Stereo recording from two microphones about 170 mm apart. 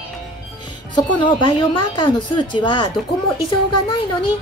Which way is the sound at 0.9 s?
30° left (ahead or behind).